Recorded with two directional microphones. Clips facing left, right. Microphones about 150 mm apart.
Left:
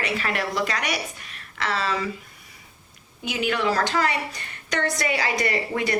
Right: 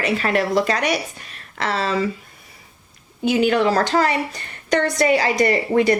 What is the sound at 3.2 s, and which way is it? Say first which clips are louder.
A woman's voice: right 8 dB; 35° right (ahead or behind).